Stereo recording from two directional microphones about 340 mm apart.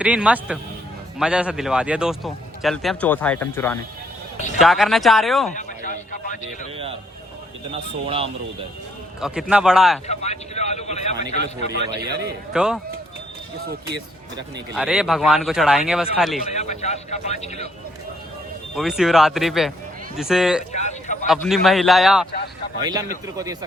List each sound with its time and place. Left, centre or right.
0.0 s speech: centre
5.5 s a sound: left
7.7 s speech: centre
9.2 s speech: centre
10.1 s speech: centre
11.3 s a man's voice: right
12.2 s speech: centre
13.6 s speech: right
14.3 s speech: centre
16.6 s speech: centre
18.8 s speech: centre
20.7 s a sound: left
21.2 s speech: centre
22.8 s speech: centre